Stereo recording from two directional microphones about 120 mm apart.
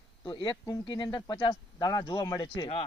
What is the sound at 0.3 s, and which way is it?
Speech, 40° left (ahead or behind).